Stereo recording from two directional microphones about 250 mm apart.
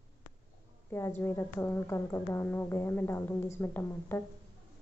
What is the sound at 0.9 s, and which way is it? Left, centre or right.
A woman's voice, centre.